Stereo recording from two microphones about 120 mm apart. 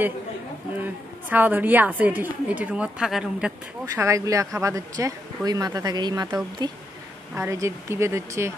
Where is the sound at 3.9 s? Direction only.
25° right (ahead or behind).